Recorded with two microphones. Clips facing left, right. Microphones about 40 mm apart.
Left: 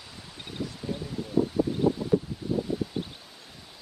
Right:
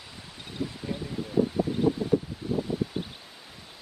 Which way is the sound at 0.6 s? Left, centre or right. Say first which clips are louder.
Right 1 dB; centre.